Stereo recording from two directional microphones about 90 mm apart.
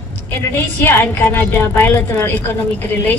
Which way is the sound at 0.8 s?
25° left (ahead or behind).